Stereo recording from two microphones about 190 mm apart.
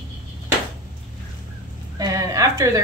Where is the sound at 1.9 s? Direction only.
20° right (ahead or behind).